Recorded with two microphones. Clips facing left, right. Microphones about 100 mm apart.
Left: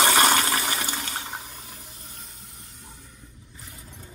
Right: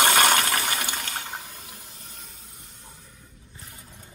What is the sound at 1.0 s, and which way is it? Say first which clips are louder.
Water: even; 20° left (ahead or behind).